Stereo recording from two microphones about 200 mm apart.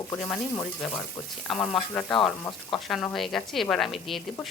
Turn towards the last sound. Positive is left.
turn(degrees=0)  # may be behind; listen again after turning